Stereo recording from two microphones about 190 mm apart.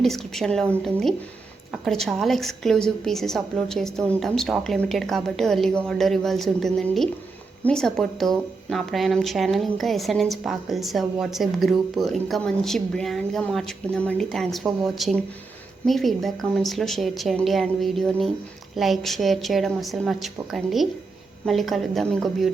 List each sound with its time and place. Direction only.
0.0 s speech: centre (ahead or behind)
1.7 s speech: centre (ahead or behind)